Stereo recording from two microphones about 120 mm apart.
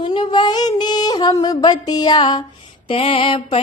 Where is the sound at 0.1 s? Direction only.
40° left (ahead or behind).